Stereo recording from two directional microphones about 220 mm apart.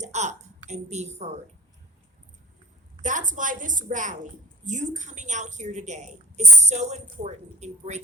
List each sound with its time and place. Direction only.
0.0 s a woman's voice: 30° right (ahead or behind)
3.0 s a woman's voice: 35° right (ahead or behind)